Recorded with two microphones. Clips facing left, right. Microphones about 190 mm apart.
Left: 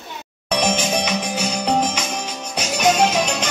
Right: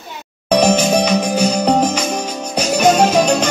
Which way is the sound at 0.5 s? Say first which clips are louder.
Right 8 dB; 40° right (ahead or behind).